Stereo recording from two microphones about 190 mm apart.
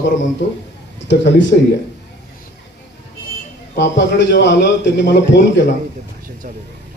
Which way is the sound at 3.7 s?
65° left (ahead or behind).